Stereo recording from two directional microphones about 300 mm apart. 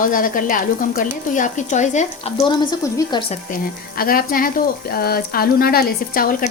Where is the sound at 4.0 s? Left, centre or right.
Left.